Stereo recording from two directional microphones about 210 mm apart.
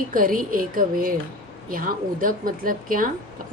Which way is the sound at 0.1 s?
40° right (ahead or behind).